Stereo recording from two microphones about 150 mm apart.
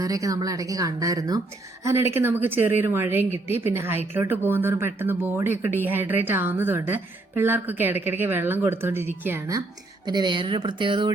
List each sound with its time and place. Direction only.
0.0 s speech: 20° right (ahead or behind)
10.1 s speech: 30° right (ahead or behind)